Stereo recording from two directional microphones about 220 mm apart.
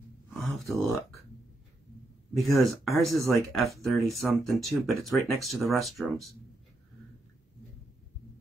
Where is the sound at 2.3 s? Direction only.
Centre (ahead or behind).